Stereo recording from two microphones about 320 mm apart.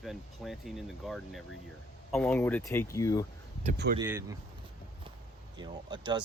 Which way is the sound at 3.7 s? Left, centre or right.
Right.